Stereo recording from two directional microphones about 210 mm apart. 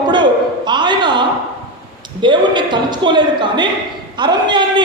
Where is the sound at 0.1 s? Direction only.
20° right (ahead or behind).